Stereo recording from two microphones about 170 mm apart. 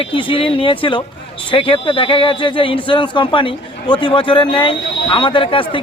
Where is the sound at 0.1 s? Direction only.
30° left (ahead or behind).